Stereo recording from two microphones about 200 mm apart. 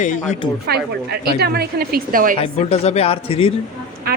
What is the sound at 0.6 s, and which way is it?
A woman's voice, 50° right (ahead or behind).